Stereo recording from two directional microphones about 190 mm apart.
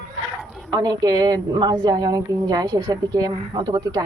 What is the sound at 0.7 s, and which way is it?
A woman's voice, 20° right (ahead or behind).